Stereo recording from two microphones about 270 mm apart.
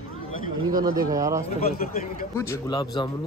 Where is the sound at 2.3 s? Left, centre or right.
Centre.